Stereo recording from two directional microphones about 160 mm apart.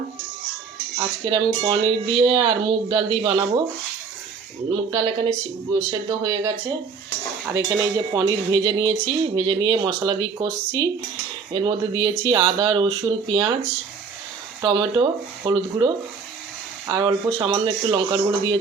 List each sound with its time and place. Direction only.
0.9 s speech: 30° right (ahead or behind)
4.7 s speech: 30° right (ahead or behind)
11.5 s speech: 30° right (ahead or behind)
14.6 s speech: 30° right (ahead or behind)